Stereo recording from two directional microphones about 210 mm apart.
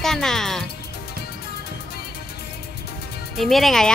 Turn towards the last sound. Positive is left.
turn(degrees=0)  # may be behind; listen again after turning